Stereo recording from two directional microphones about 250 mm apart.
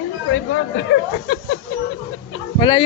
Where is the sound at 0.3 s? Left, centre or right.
Left.